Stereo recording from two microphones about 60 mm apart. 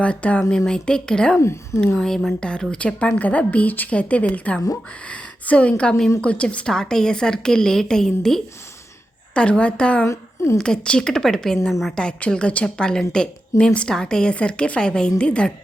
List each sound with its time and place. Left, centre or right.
0.0 s a woman's voice: left
1.4 s speech: left
2.0 s a woman's voice: centre
9.3 s a woman's voice: centre
10.1 s a woman's voice: left
10.6 s a woman's voice: centre
11.7 s a woman's voice: centre
11.9 s a woman's voice: centre